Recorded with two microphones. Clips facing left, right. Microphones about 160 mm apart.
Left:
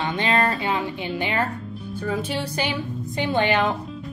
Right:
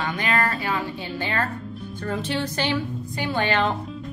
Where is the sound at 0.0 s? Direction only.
25° left (ahead or behind).